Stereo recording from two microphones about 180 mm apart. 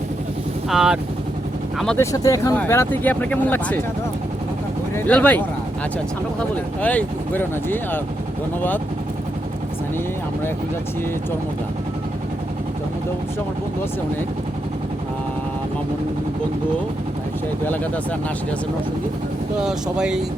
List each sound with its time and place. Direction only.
0.7 s speech: 5° right (ahead or behind)
2.0 s speech: 20° left (ahead or behind)
4.9 s speech: 10° left (ahead or behind)
6.8 s speech: 10° left (ahead or behind)
19.5 s speech: 5° right (ahead or behind)